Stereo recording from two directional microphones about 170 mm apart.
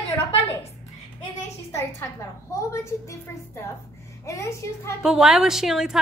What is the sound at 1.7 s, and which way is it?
A woman's voice, 15° left (ahead or behind).